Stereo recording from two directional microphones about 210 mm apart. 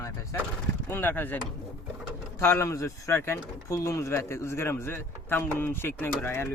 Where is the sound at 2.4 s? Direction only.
15° left (ahead or behind).